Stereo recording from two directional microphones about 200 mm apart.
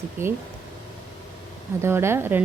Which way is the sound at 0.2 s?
10° right (ahead or behind).